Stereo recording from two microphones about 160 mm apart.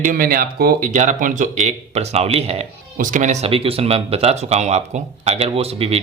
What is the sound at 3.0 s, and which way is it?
Speech, 55° right (ahead or behind).